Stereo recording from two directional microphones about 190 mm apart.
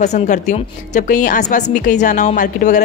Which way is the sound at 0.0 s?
40° left (ahead or behind).